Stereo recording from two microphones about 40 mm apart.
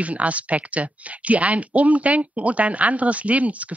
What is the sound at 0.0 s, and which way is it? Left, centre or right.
Speech, right.